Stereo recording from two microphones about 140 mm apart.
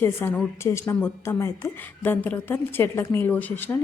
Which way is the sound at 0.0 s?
15° left (ahead or behind).